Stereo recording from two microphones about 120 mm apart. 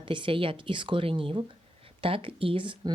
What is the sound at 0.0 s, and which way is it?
A woman's voice, 45° right (ahead or behind).